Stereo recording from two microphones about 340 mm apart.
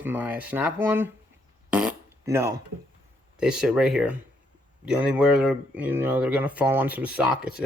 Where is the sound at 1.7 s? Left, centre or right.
Centre.